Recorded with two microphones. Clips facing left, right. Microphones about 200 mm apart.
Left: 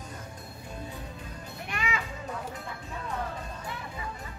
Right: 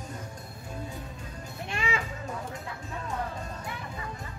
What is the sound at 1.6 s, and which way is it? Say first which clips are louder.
Music: right 2 dB; 25° right (ahead or behind).